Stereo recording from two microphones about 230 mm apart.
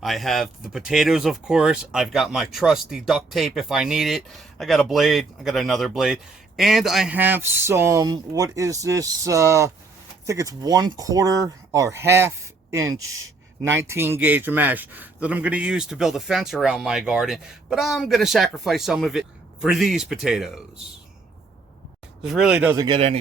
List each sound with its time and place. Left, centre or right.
0.0 s speech: centre
13.1 s speech: right
13.6 s speech: centre
22.2 s speech: centre